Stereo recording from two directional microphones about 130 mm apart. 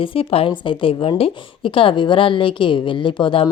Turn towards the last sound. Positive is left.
turn(degrees=40)  # may be behind; listen again after turning